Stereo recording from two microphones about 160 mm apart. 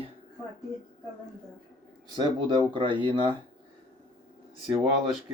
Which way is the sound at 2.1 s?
25° right (ahead or behind).